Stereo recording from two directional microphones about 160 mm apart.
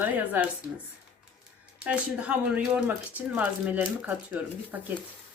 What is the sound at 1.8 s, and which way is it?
Speech, 10° right (ahead or behind).